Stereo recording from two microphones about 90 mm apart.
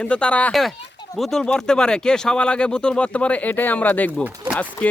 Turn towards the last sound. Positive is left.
turn(degrees=15)  # may be behind; listen again after turning